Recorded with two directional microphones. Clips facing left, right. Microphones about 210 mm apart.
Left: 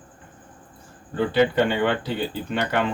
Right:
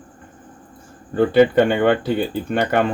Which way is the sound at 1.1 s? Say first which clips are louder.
Right 6 dB; 50° right (ahead or behind).